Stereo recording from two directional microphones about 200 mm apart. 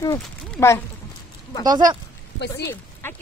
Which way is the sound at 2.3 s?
55° left (ahead or behind).